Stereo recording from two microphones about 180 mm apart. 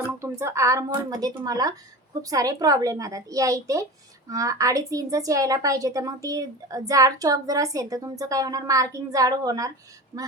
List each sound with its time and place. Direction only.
0.2 s a woman's voice: 15° right (ahead or behind)